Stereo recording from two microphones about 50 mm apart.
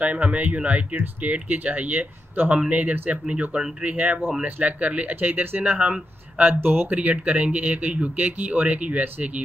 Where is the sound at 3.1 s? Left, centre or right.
Right.